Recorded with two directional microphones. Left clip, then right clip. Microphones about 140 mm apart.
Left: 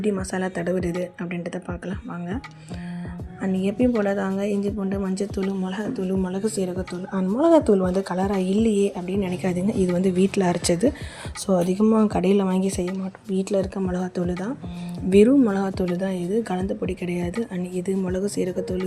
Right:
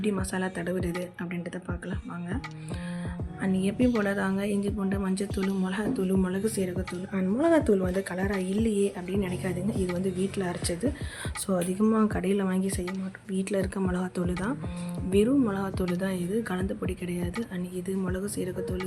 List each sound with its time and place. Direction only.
0.0 s a woman's voice: 25° left (ahead or behind)
3.4 s a woman's voice: 20° left (ahead or behind)
7.3 s a woman's voice: 25° left (ahead or behind)
9.4 s speech: 50° left (ahead or behind)
11.4 s speech: 35° left (ahead or behind)
13.3 s a woman's voice: 20° left (ahead or behind)
15.1 s speech: 45° left (ahead or behind)
16.0 s a woman's voice: 25° left (ahead or behind)